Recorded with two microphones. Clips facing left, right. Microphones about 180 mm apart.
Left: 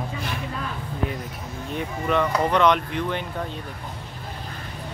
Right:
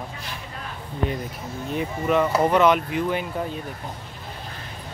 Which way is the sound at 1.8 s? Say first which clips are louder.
Right 2 dB; 5° right (ahead or behind).